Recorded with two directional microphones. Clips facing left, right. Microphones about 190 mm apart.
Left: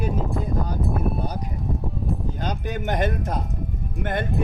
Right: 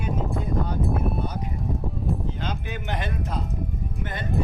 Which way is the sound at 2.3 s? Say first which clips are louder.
Left 4 dB; 45° left (ahead or behind).